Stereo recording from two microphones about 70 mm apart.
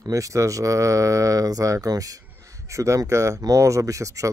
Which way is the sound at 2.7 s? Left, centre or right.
Right.